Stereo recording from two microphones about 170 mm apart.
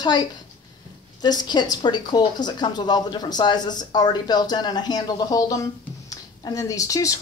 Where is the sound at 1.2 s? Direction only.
25° left (ahead or behind).